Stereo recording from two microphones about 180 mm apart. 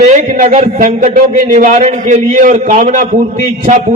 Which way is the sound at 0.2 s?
40° right (ahead or behind).